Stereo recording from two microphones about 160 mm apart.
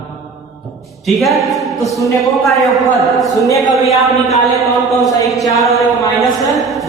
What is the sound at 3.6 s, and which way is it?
Speech, 45° left (ahead or behind).